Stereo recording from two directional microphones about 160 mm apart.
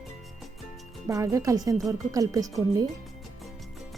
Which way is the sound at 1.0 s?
20° right (ahead or behind).